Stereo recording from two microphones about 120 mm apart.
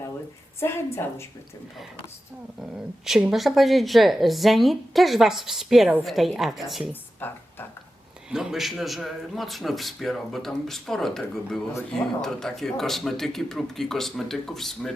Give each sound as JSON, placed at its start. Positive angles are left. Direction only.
{"t": 0.6, "sound": "a woman's voice", "side_deg": 20}
{"t": 2.6, "sound": "a woman's voice", "side_deg": -5}
{"t": 7.2, "sound": "speech", "side_deg": 15}
{"t": 8.3, "sound": "a woman's voice", "side_deg": -5}